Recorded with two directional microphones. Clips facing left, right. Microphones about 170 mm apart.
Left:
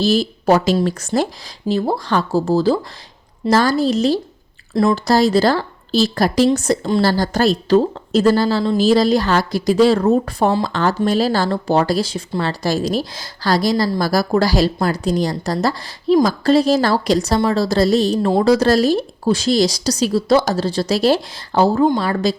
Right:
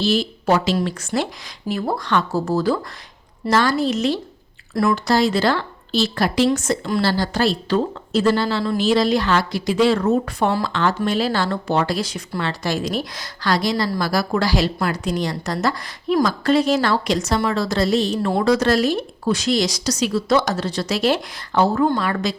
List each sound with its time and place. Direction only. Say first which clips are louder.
0.0 s speech: left 4 dB; 40° left (ahead or behind)
4.7 s speech: left 3 dB; 25° left (ahead or behind)
5.0 s speech: left 4 dB; 35° left (ahead or behind)
7.0 s speech: left 4 dB; 45° left (ahead or behind)